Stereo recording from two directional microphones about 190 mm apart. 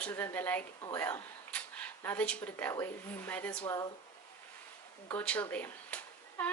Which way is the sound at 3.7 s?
20° left (ahead or behind).